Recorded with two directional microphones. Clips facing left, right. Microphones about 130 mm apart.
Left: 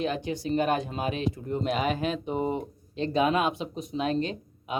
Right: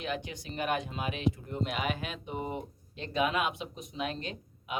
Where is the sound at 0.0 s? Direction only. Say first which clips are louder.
Left 7 dB; 35° left (ahead or behind).